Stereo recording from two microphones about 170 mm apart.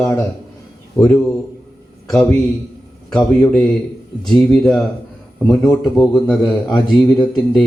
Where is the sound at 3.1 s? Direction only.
5° left (ahead or behind).